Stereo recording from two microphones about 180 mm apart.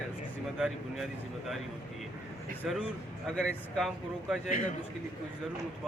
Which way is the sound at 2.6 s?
Centre (ahead or behind).